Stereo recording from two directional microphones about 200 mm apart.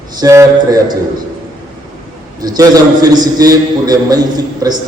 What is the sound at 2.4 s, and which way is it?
A man's voice, 20° right (ahead or behind).